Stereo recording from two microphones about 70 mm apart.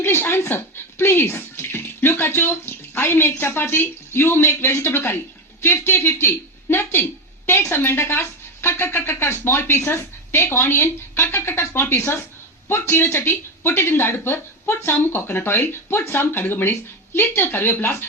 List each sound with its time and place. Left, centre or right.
0.0 s speech: left